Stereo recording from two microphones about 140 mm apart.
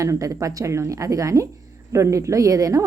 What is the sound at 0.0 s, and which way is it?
Speech, 20° right (ahead or behind).